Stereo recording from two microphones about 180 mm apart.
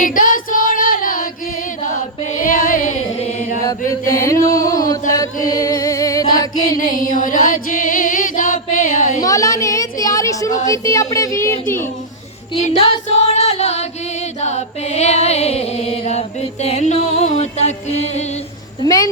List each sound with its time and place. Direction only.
0.0 s child singing: 50° left (ahead or behind)
2.4 s a sound: 50° left (ahead or behind)
4.2 s music: 15° left (ahead or behind)
7.1 s chant: 45° left (ahead or behind)
9.2 s a sound: 20° left (ahead or behind)
10.7 s speech: 15° left (ahead or behind)
12.5 s music: 35° left (ahead or behind)
18.8 s a woman's voice: 20° left (ahead or behind)